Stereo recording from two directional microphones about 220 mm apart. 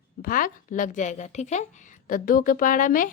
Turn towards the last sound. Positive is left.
turn(degrees=35)  # may be behind; listen again after turning